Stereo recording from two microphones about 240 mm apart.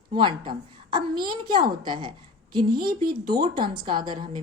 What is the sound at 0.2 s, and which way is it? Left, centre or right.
A woman's voice, centre.